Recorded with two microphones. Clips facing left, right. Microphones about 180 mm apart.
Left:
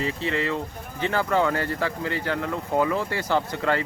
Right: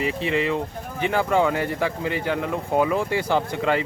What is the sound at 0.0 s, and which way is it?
Speech, 15° right (ahead or behind).